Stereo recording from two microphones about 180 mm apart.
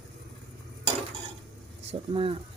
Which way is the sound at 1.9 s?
30° right (ahead or behind).